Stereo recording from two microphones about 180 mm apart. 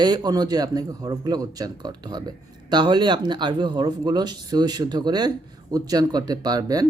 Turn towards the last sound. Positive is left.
turn(degrees=-20)  # may be behind; listen again after turning